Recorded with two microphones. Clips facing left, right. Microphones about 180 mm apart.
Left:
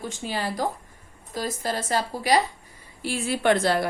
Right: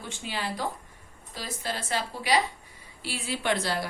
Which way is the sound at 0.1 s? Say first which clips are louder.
Even; 45° left (ahead or behind).